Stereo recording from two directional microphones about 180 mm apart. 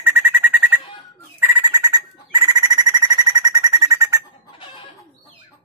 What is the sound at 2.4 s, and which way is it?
Alarm clock, 20° right (ahead or behind).